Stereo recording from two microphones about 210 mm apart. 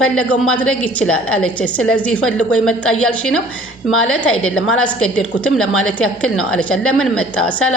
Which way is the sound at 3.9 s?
75° left (ahead or behind).